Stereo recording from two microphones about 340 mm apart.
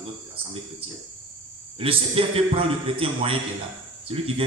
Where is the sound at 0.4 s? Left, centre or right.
Centre.